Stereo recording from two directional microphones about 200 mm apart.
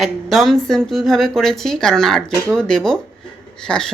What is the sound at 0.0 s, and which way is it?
A woman's voice, centre (ahead or behind).